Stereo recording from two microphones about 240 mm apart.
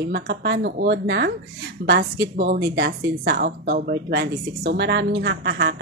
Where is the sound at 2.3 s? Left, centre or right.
Right.